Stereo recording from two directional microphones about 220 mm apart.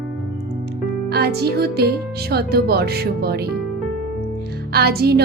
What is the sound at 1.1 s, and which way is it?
Music, 45° right (ahead or behind).